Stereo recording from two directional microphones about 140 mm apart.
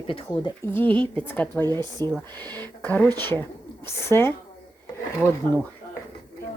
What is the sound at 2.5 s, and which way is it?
Speech, 10° left (ahead or behind).